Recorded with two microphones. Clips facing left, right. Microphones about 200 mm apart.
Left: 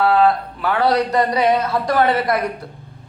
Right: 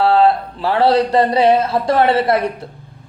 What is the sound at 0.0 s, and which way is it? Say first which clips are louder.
Speech: right 2 dB; 30° right (ahead or behind).